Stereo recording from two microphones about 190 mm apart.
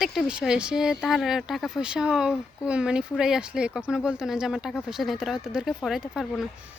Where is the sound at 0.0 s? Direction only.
Centre (ahead or behind).